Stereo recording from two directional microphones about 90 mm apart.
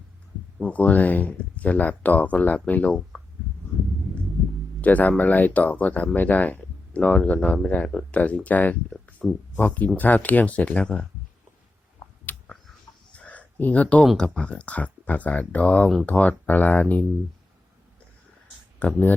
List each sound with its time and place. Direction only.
0.6 s speech: 15° left (ahead or behind)
4.8 s speech: 15° left (ahead or behind)
12.2 s a sound: 15° left (ahead or behind)
14.2 s speech: 10° left (ahead or behind)
18.8 s speech: 20° left (ahead or behind)